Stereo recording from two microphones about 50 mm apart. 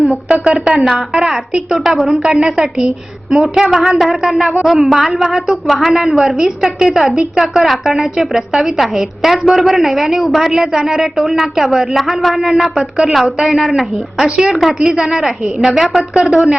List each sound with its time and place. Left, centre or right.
0.0 s a sound: centre
0.4 s a woman's voice: centre
2.8 s a woman's voice: centre
3.4 s a woman's voice: centre
14.3 s a woman's voice: centre
14.5 s a woman's voice: centre
14.8 s a woman's voice: centre
15.5 s a woman's voice: centre